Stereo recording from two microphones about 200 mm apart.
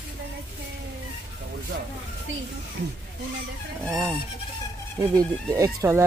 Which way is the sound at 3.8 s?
10° right (ahead or behind).